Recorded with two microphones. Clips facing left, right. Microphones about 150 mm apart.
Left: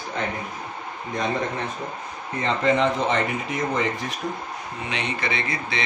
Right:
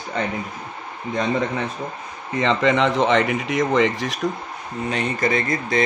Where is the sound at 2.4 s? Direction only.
90° right.